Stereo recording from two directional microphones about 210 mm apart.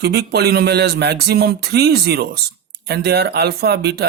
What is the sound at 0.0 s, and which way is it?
Speech, 50° right (ahead or behind).